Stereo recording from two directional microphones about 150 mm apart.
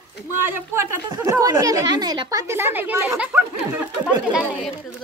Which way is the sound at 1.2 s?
20° right (ahead or behind).